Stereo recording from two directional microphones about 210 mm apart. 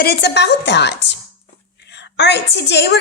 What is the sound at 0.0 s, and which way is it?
A woman's voice, 50° left (ahead or behind).